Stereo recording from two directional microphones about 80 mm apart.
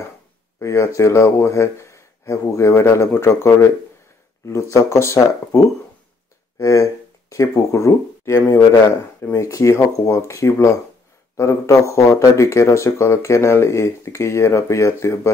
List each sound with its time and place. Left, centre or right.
0.6 s speech: left
6.6 s speech: left